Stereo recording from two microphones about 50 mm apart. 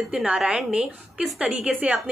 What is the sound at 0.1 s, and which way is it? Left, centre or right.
A woman's voice, centre.